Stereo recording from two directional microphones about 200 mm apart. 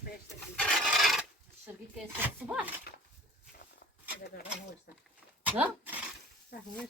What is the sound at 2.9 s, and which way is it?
Dog, 50° left (ahead or behind).